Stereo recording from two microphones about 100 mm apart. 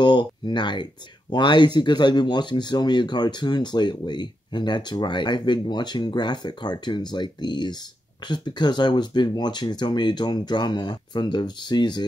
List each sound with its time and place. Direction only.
0.0 s speech: 50° left (ahead or behind)